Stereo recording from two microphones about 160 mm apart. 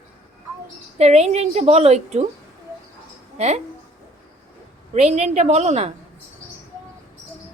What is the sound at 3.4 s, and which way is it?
Speech, 40° right (ahead or behind).